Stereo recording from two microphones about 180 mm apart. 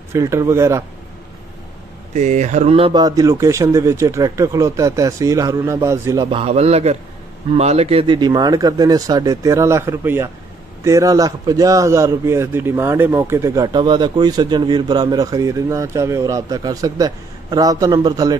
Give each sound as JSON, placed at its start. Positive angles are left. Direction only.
{"t": 0.1, "sound": "speech", "side_deg": -15}
{"t": 2.1, "sound": "speech", "side_deg": -40}
{"t": 6.3, "sound": "a man's voice", "side_deg": -35}